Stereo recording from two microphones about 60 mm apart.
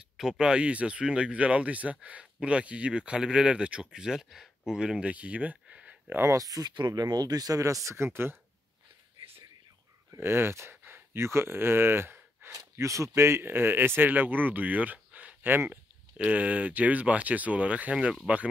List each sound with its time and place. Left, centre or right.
0.2 s speech: centre
5.1 s a sound: right
6.3 s speech: right
10.1 s speech: right
12.7 s speech: right
15.5 s speech: right
16.2 s speech: right